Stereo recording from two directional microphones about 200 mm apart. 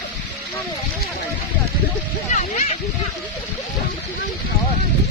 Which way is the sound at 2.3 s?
35° left (ahead or behind).